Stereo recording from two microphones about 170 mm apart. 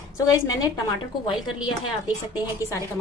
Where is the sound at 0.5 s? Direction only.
20° left (ahead or behind).